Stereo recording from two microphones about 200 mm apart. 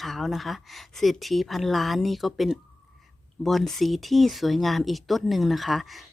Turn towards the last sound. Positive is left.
turn(degrees=0)  # may be behind; listen again after turning